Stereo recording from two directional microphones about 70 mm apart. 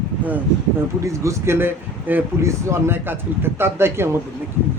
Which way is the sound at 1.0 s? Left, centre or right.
Right.